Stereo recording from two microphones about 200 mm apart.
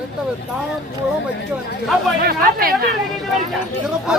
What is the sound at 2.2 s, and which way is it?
Speech, 50° right (ahead or behind).